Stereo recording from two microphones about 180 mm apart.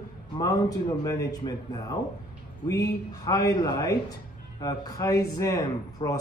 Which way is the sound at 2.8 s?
20° left (ahead or behind).